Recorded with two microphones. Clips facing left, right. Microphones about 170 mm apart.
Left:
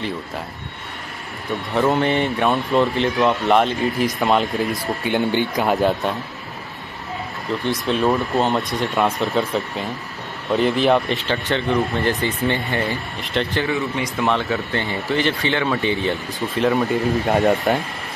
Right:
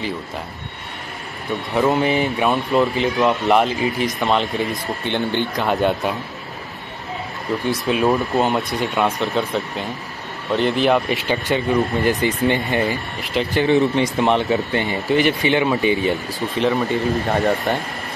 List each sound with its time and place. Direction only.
1.7 s speech: centre (ahead or behind)
7.6 s speech: 10° right (ahead or behind)
11.5 s speech: 15° right (ahead or behind)
13.2 s speech: 5° right (ahead or behind)
13.7 s speech: 30° right (ahead or behind); by 16.2 s 10° right (ahead or behind)
16.3 s speech: centre (ahead or behind)